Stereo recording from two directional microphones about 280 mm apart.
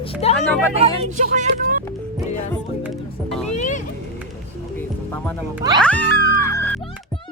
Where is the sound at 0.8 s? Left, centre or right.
Right.